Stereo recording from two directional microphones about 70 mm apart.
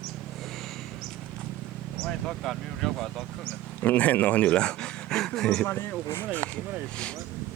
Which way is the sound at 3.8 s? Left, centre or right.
Left.